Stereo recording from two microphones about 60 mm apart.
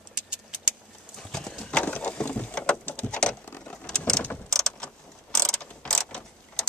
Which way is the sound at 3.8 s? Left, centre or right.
Centre.